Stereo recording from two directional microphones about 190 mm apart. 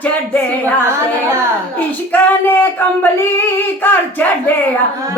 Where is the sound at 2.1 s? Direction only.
10° left (ahead or behind).